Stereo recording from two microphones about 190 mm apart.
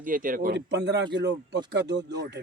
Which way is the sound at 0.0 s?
45° right (ahead or behind).